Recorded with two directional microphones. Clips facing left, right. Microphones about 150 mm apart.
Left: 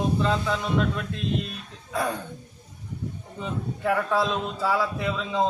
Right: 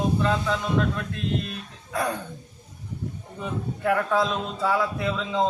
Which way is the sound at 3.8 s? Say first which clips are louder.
Right 1 dB; 5° left (ahead or behind).